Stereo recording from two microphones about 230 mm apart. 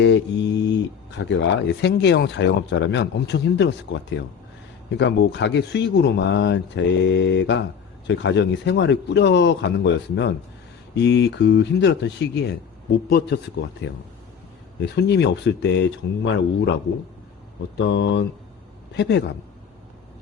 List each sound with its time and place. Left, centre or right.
0.0 s mantra: left
1.2 s speech: left
17.7 s speech: left